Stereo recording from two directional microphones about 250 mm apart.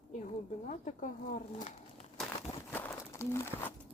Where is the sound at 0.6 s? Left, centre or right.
Left.